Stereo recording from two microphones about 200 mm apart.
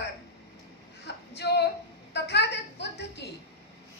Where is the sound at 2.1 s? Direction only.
55° left (ahead or behind).